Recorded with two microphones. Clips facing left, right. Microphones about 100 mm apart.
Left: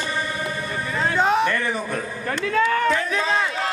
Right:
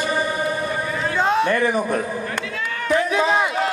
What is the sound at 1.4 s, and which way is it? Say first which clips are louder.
Speech: right 4 dB; 15° right (ahead or behind).